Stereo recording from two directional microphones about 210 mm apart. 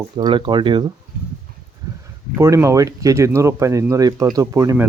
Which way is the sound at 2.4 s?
15° right (ahead or behind).